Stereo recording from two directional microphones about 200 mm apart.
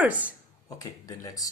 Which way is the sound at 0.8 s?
15° left (ahead or behind).